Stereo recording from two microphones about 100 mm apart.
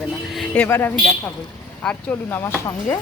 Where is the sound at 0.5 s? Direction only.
20° left (ahead or behind).